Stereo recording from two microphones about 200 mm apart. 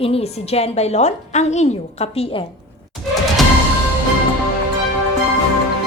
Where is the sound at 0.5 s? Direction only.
35° left (ahead or behind).